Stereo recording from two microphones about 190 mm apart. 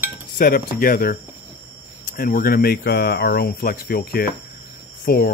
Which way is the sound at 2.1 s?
50° left (ahead or behind).